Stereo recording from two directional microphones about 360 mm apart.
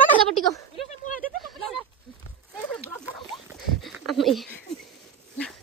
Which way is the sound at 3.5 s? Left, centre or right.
Centre.